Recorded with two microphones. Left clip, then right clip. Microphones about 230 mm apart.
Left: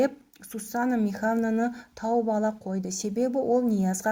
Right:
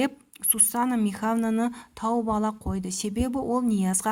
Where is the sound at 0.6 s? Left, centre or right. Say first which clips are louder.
Right 1 dB; right.